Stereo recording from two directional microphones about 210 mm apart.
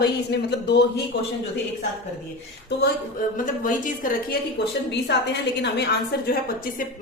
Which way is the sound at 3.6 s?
40° left (ahead or behind).